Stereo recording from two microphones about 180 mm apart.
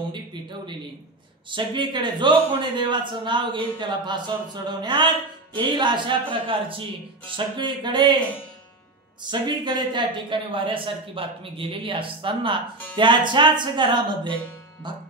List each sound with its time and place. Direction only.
0.1 s a man's voice: 25° right (ahead or behind)
9.2 s a man's voice: 25° right (ahead or behind)